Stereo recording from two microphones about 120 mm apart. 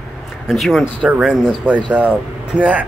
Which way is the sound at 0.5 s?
Centre (ahead or behind).